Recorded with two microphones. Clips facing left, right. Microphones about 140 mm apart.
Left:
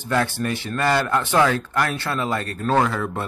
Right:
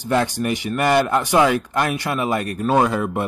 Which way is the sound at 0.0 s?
15° right (ahead or behind).